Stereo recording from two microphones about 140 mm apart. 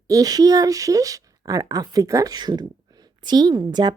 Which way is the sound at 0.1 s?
25° right (ahead or behind).